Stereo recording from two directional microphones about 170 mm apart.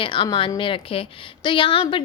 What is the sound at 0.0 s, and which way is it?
A woman's voice, 30° left (ahead or behind).